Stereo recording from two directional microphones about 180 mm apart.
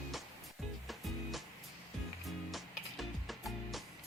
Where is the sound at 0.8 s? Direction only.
Centre (ahead or behind).